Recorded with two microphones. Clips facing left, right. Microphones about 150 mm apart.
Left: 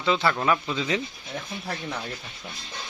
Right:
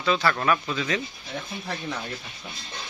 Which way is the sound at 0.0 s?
20° left (ahead or behind).